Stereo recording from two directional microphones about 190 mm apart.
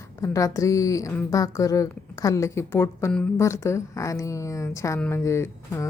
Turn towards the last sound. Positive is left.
turn(degrees=15)  # may be behind; listen again after turning